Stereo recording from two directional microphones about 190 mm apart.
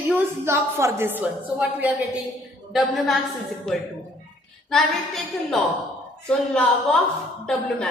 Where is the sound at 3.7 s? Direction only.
5° left (ahead or behind).